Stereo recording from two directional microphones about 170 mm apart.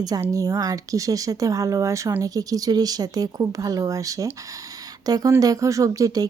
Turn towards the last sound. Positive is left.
turn(degrees=-20)  # may be behind; listen again after turning